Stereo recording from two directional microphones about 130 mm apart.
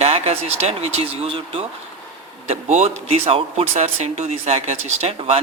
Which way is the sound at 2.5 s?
60° right (ahead or behind).